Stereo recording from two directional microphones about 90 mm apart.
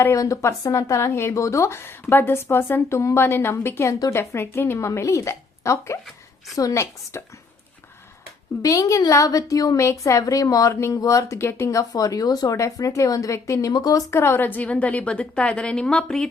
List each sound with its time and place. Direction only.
0.0 s a woman's voice: 35° left (ahead or behind)
8.6 s a woman's voice: 35° left (ahead or behind)
13.7 s speech: 45° left (ahead or behind)
14.1 s a woman's voice: 30° left (ahead or behind); by 16.3 s 10° left (ahead or behind)